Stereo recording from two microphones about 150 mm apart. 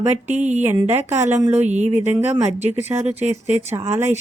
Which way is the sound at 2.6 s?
15° right (ahead or behind).